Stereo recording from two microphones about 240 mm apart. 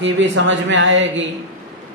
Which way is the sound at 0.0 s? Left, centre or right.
Right.